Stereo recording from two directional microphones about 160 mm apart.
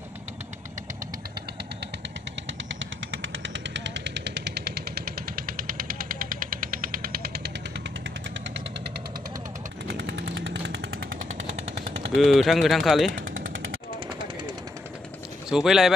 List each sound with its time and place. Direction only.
3.6 s vehicle: 90° right
9.8 s chainsaw: 90° right
11.5 s a sound: 40° right (ahead or behind)
12.2 s speech: centre (ahead or behind)
13.1 s machine gun: 60° right (ahead or behind)
15.5 s speech: 5° right (ahead or behind)